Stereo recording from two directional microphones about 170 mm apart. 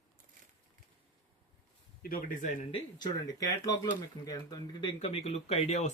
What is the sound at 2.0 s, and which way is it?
Speech, 60° left (ahead or behind).